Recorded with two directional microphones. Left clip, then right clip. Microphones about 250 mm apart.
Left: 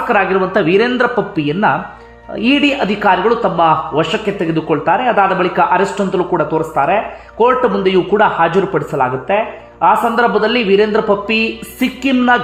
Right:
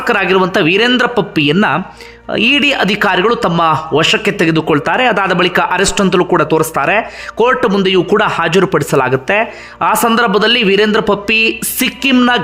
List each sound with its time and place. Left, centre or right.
0.1 s a man's voice: centre